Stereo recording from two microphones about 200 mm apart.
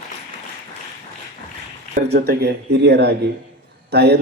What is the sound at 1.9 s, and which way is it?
Speech, 55° right (ahead or behind).